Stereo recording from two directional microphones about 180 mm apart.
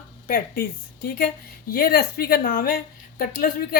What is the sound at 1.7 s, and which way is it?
A woman's voice, 60° left (ahead or behind).